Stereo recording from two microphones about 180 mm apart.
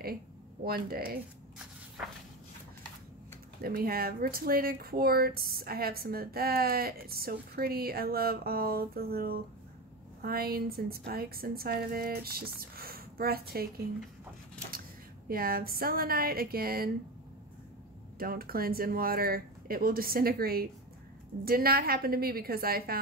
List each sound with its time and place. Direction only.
0.7 s speech: 55° right (ahead or behind)
2.0 s walk: 5° right (ahead or behind)
3.6 s speech: 55° right (ahead or behind)
15.2 s speech: 55° right (ahead or behind)
18.2 s speech: 55° right (ahead or behind)